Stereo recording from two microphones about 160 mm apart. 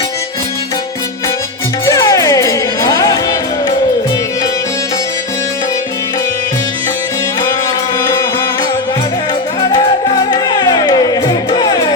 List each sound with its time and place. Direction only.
1.8 s music: 20° left (ahead or behind)
10.3 s music: 25° left (ahead or behind)